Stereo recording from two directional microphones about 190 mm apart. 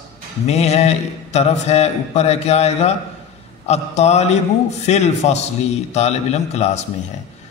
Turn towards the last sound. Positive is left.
turn(degrees=35)  # may be behind; listen again after turning